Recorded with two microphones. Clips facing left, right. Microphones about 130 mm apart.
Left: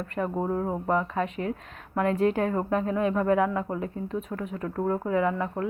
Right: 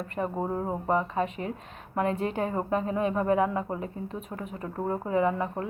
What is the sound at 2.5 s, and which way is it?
A woman's voice, 10° right (ahead or behind).